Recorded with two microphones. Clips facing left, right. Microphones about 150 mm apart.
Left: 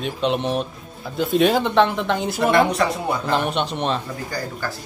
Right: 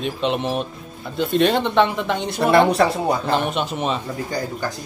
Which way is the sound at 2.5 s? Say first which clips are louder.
Right 4 dB; 35° right (ahead or behind).